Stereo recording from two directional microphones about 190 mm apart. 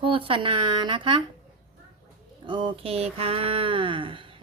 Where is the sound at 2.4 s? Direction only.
25° right (ahead or behind).